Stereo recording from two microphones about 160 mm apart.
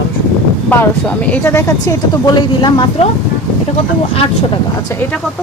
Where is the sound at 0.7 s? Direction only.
10° left (ahead or behind); by 3.1 s 30° left (ahead or behind).